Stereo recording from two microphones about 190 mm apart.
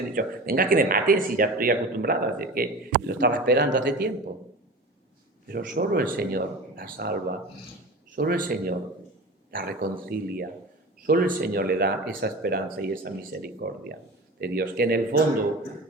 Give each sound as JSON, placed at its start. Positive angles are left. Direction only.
{"t": 0.1, "sound": "speech", "side_deg": -50}
{"t": 5.5, "sound": "speech", "side_deg": -50}